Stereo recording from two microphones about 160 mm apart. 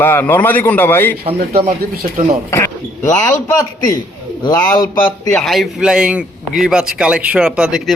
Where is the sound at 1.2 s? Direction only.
35° right (ahead or behind).